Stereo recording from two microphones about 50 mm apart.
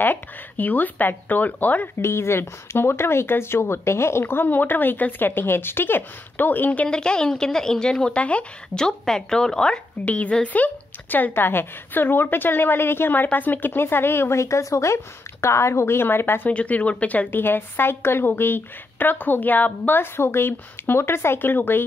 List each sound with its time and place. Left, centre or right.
0.0 s speech: left
2.0 s speech: left
6.9 s speech: centre
8.7 s speech: centre
10.0 s speech: left
14.4 s speech: left
15.4 s a woman's voice: left
16.4 s speech: left
17.3 s speech: left
20.0 s speech: left